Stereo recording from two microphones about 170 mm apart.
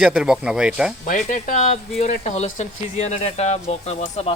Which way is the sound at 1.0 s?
50° left (ahead or behind).